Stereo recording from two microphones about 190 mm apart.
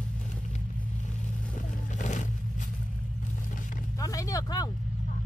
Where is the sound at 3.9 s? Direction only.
15° left (ahead or behind).